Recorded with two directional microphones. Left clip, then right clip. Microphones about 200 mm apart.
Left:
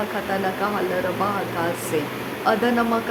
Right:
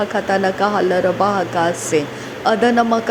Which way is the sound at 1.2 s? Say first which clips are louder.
Right 6 dB; 25° right (ahead or behind).